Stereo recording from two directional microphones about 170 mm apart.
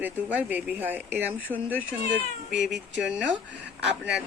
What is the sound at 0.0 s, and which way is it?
Speech, 10° right (ahead or behind).